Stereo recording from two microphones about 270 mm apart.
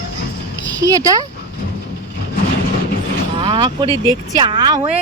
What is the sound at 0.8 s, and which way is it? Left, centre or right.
Speech, centre.